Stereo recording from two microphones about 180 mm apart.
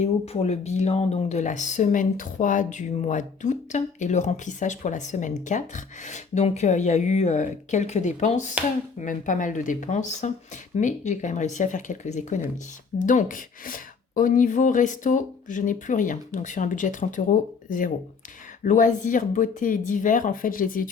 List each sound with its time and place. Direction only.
0.0 s speech: 35° left (ahead or behind)